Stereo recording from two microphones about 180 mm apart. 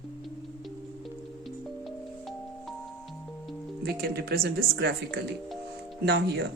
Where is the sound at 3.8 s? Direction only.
60° right (ahead or behind).